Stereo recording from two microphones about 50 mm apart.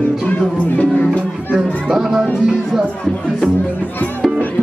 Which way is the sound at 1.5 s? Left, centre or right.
Centre.